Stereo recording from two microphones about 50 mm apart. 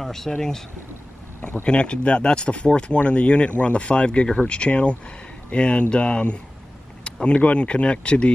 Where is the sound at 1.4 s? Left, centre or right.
Left.